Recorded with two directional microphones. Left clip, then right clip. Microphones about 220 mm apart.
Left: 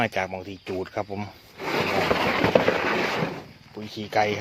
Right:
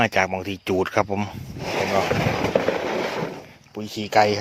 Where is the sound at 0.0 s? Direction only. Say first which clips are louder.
Right 6 dB; 30° right (ahead or behind).